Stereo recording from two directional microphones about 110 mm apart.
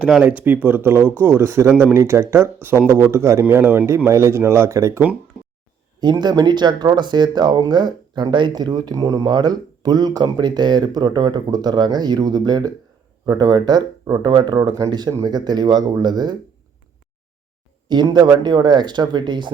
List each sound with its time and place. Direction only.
0.2 s speech: 15° right (ahead or behind)
6.0 s speech: 40° right (ahead or behind)
17.8 s speech: 40° right (ahead or behind)